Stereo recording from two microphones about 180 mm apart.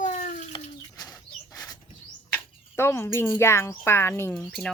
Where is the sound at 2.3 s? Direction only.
15° left (ahead or behind).